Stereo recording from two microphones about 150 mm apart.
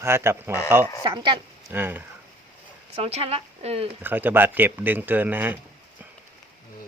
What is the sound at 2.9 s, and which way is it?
Speech, 40° right (ahead or behind).